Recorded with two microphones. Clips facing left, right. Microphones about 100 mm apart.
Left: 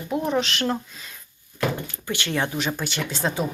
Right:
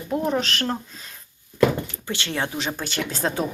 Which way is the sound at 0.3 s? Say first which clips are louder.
Left 3 dB; 40° right (ahead or behind).